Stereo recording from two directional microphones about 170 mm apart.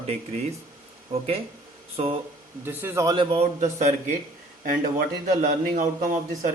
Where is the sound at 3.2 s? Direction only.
35° right (ahead or behind); by 6.5 s 50° right (ahead or behind).